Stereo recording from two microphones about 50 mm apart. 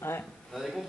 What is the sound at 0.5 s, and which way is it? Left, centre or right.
Speech, centre.